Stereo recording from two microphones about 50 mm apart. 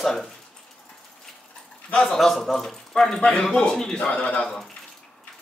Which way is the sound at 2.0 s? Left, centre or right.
Centre.